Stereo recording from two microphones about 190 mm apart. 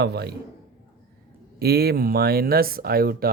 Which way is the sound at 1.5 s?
55° right (ahead or behind).